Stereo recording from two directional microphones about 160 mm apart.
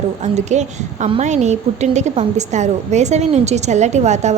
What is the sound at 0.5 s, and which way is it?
A woman's voice, 45° right (ahead or behind).